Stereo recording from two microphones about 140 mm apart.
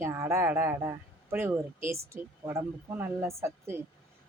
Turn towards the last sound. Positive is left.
turn(degrees=-20)  # may be behind; listen again after turning